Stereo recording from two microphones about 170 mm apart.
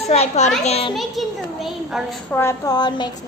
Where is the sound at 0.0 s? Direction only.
40° left (ahead or behind).